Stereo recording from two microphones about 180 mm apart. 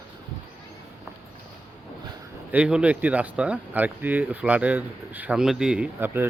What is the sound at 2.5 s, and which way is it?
Speech, 5° right (ahead or behind).